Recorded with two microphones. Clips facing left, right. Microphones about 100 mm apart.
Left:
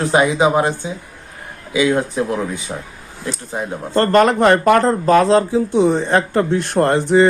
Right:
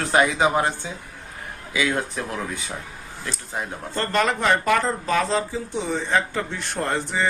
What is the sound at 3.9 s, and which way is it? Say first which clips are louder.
Speech: left 10 dB; 60° left (ahead or behind).